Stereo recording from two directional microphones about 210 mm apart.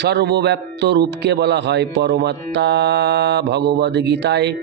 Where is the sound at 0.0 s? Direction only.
55° right (ahead or behind).